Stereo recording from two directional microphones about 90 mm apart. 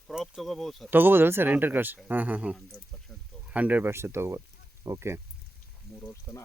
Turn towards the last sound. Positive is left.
turn(degrees=-30)  # may be behind; listen again after turning